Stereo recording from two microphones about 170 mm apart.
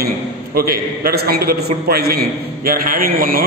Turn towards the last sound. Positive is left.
turn(degrees=-55)  # may be behind; listen again after turning